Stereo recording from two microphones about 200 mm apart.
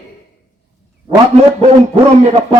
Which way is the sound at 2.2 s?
30° right (ahead or behind).